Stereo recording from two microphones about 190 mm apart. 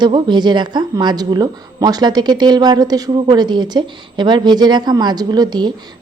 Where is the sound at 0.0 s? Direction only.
25° right (ahead or behind).